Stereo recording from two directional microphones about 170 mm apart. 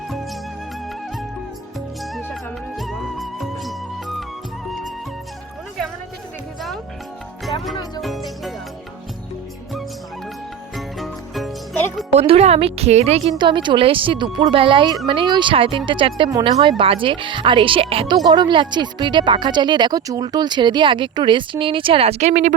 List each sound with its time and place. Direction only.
2.1 s music: centre (ahead or behind)
8.0 s music: centre (ahead or behind)
10.8 s music: centre (ahead or behind)
12.1 s speech: 35° right (ahead or behind)